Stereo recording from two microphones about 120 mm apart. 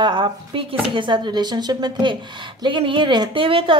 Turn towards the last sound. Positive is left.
turn(degrees=-45)  # may be behind; listen again after turning